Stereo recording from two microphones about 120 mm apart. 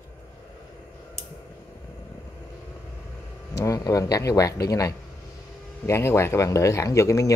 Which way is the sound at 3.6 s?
25° left (ahead or behind).